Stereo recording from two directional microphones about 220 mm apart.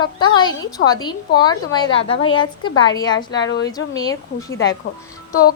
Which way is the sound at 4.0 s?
15° left (ahead or behind).